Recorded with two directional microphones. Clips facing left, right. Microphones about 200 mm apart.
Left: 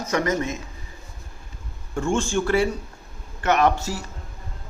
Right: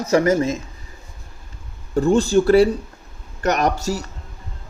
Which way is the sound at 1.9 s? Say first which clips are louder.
Right 7 dB; 35° right (ahead or behind).